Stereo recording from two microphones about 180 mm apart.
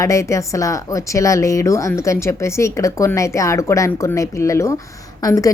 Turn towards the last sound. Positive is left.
turn(degrees=20)  # may be behind; listen again after turning